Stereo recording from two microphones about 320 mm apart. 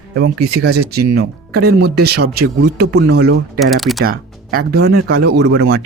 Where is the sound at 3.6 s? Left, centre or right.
Centre.